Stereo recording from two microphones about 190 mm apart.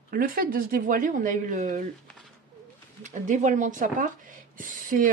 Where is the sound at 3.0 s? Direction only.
40° right (ahead or behind).